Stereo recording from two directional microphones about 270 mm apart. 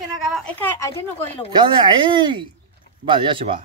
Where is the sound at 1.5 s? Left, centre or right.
Centre.